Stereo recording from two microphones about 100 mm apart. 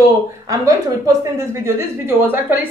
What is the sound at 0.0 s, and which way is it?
Speech, 35° right (ahead or behind).